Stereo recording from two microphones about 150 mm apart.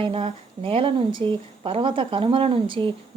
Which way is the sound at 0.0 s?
40° right (ahead or behind).